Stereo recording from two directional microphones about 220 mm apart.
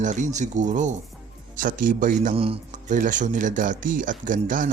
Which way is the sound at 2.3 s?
25° right (ahead or behind).